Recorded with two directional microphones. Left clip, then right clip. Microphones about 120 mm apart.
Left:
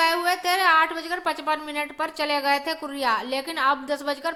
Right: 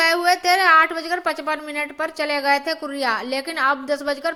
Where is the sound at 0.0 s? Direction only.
25° right (ahead or behind).